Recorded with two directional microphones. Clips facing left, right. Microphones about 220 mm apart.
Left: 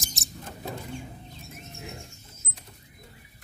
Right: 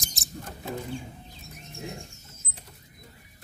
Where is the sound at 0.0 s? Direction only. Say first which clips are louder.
Left 2 dB; centre (ahead or behind).